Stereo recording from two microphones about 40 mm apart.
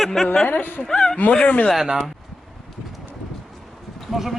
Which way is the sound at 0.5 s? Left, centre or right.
Left.